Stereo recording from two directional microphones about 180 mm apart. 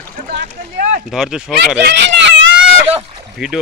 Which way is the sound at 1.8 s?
70° right (ahead or behind).